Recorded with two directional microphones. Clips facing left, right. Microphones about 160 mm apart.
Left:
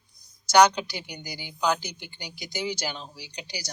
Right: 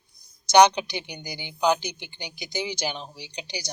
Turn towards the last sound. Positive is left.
turn(degrees=-20)  # may be behind; listen again after turning